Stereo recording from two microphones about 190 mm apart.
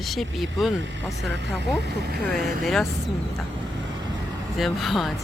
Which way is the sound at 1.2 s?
65° right (ahead or behind).